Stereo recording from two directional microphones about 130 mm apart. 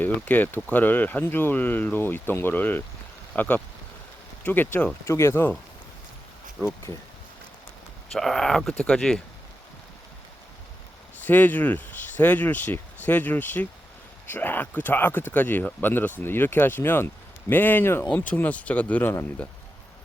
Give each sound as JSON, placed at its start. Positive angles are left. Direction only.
{"t": 0.0, "sound": "speech", "side_deg": 15}
{"t": 6.6, "sound": "speech", "side_deg": 15}
{"t": 8.1, "sound": "speech", "side_deg": 5}
{"t": 11.3, "sound": "speech", "side_deg": 15}